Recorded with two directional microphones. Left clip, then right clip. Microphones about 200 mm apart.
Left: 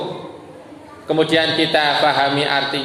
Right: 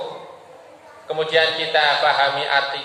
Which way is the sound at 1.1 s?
35° left (ahead or behind).